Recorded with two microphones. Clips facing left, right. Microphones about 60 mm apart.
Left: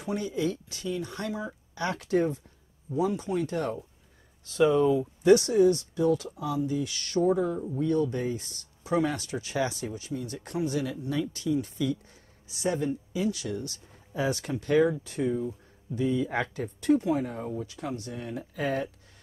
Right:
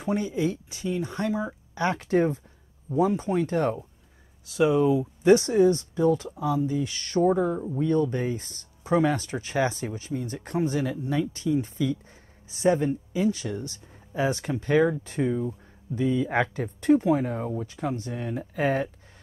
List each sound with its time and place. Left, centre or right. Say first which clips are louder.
0.0 s speech: right 3 dB; right
4.5 s speech: right 1 dB; centre
5.2 s speech: right 1 dB; right
7.4 s speech: right 3 dB; right
7.8 s speech: right 2 dB; right